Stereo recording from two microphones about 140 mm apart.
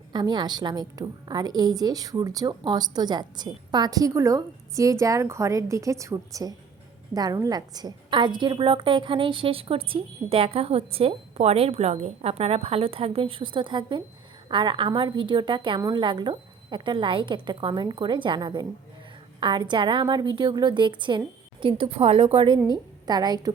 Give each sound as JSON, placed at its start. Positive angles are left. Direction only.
{"t": 0.1, "sound": "a woman's voice", "side_deg": -30}